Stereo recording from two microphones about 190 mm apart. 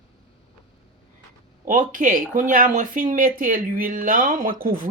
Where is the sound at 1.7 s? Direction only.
45° right (ahead or behind).